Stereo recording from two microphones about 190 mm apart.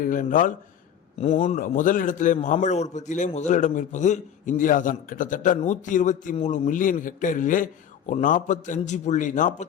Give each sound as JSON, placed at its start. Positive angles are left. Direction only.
{"t": 0.0, "sound": "a man's voice", "side_deg": 45}
{"t": 1.2, "sound": "a man's voice", "side_deg": 35}
{"t": 1.5, "sound": "a man's voice", "side_deg": 45}